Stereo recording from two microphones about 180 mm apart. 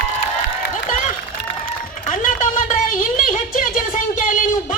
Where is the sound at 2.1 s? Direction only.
45° left (ahead or behind).